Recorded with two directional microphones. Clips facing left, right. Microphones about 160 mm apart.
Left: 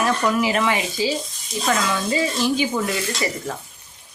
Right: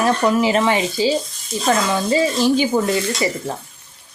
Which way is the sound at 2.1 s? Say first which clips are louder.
Right 6 dB; 35° right (ahead or behind).